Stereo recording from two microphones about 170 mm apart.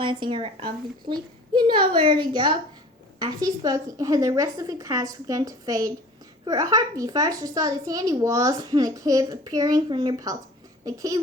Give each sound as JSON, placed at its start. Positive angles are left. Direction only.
{"t": 0.0, "sound": "speech", "side_deg": -30}